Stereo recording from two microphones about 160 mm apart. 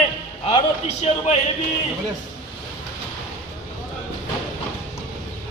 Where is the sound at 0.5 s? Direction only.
40° left (ahead or behind).